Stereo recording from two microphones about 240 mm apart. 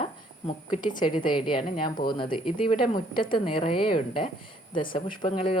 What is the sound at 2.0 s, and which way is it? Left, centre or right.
Speech, left.